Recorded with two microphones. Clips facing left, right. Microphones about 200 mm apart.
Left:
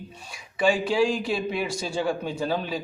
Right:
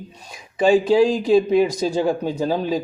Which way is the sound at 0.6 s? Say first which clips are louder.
Right 7 dB; 40° right (ahead or behind).